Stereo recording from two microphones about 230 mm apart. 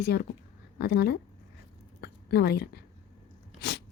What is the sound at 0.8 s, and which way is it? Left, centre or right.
Speech, left.